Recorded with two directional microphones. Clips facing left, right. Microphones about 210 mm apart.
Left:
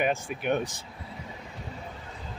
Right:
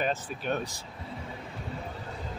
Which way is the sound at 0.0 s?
15° left (ahead or behind).